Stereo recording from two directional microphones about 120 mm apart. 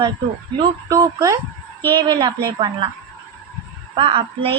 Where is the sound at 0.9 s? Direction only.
30° right (ahead or behind).